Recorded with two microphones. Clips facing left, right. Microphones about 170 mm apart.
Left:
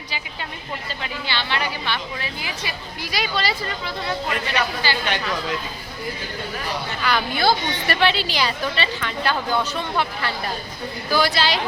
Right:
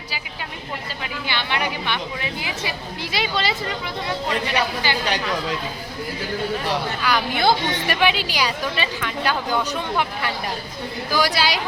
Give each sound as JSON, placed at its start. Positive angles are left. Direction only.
{"t": 1.3, "sound": "a woman's voice", "side_deg": -15}
{"t": 7.0, "sound": "a woman's voice", "side_deg": -10}
{"t": 11.1, "sound": "a woman's voice", "side_deg": -10}